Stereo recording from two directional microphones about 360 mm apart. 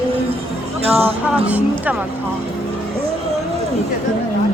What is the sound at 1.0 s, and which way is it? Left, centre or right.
Speech, centre.